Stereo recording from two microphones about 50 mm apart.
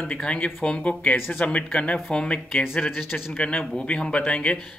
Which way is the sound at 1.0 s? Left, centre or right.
Left.